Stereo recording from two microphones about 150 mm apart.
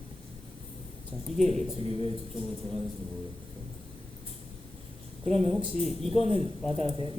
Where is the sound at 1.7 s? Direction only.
40° right (ahead or behind).